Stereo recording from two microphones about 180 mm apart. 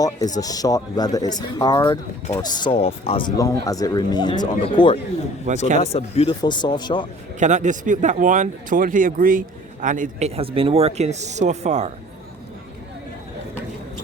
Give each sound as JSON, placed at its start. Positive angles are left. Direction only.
{"t": 0.0, "sound": "a man's voice", "side_deg": 20}
{"t": 7.3, "sound": "speech", "side_deg": -40}